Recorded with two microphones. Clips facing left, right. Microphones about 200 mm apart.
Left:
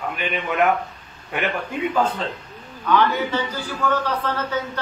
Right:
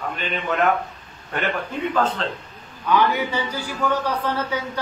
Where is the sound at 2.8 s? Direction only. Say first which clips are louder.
Even; 10° right (ahead or behind).